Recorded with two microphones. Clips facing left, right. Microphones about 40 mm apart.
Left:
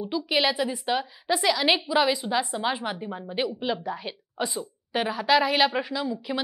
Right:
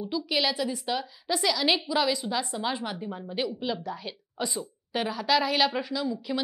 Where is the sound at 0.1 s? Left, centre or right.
Centre.